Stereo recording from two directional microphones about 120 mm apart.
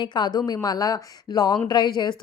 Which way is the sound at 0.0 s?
40° left (ahead or behind).